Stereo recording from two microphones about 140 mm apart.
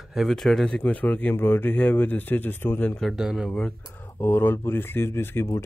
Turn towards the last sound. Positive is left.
turn(degrees=15)  # may be behind; listen again after turning